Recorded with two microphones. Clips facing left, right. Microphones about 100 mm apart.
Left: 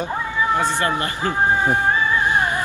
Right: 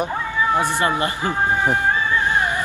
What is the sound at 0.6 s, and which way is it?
Speech, 15° right (ahead or behind).